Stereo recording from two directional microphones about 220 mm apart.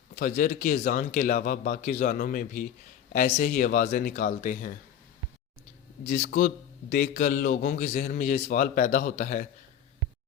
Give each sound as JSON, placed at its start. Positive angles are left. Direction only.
{"t": 0.2, "sound": "a man's voice", "side_deg": 40}
{"t": 6.1, "sound": "a man's voice", "side_deg": 35}